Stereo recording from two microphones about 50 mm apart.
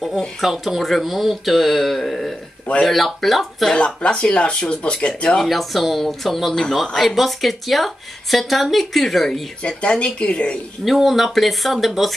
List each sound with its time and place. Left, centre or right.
0.4 s speech: centre
3.7 s speech: centre
5.4 s speech: centre
9.6 s speech: left
10.9 s speech: centre